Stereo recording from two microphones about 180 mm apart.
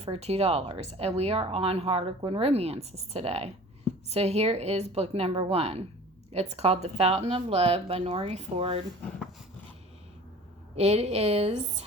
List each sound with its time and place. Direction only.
0.0 s speech: 35° right (ahead or behind)
10.8 s speech: 35° right (ahead or behind)